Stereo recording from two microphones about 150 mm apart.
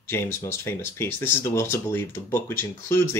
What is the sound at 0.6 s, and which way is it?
Speech, 15° left (ahead or behind).